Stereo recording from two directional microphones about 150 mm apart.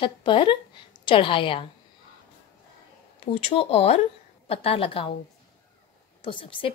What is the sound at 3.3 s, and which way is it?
A woman's voice, 40° left (ahead or behind).